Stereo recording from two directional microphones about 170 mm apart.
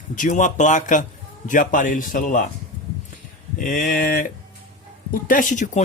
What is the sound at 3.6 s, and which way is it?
Speech, 50° left (ahead or behind).